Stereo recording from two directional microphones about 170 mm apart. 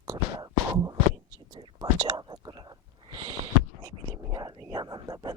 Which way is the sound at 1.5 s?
25° right (ahead or behind).